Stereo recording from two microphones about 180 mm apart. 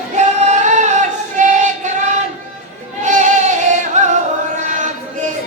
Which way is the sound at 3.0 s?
45° right (ahead or behind).